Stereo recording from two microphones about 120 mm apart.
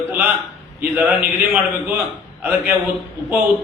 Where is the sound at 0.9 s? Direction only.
15° right (ahead or behind).